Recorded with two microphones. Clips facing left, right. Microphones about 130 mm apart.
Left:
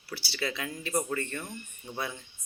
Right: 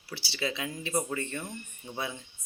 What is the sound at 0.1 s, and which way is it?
Speech, 20° right (ahead or behind).